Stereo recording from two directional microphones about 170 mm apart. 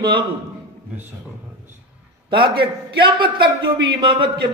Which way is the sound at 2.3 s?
30° right (ahead or behind).